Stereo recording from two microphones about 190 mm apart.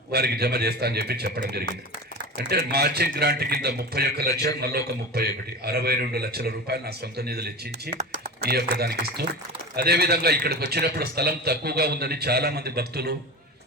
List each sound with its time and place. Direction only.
0.1 s a man's voice: 55° right (ahead or behind)